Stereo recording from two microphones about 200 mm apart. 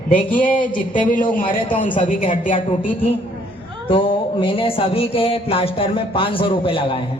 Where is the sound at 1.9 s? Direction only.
25° left (ahead or behind).